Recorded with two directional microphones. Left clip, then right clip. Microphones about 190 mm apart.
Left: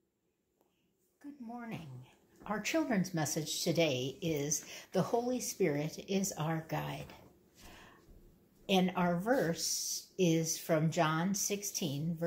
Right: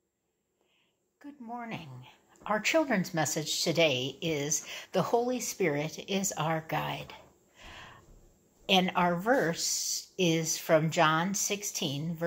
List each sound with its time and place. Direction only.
1.2 s speech: 10° right (ahead or behind)
7.6 s a sound: 5° right (ahead or behind)
8.6 s speech: 10° right (ahead or behind)